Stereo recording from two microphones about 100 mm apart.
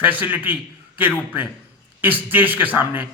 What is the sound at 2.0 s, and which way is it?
Speech, 20° right (ahead or behind).